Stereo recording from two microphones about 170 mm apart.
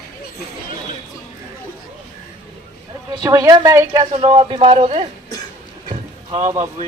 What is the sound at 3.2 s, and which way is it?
Speech, 20° right (ahead or behind).